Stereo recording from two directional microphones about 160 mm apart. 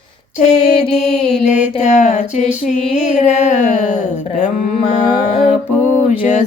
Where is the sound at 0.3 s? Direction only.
45° left (ahead or behind).